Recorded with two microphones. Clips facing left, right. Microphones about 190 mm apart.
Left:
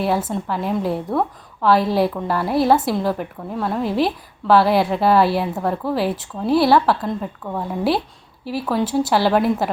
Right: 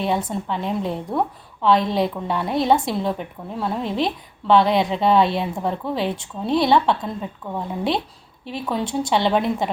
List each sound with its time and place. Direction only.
0.0 s a woman's voice: 5° left (ahead or behind)
8.4 s a woman's voice: 5° left (ahead or behind)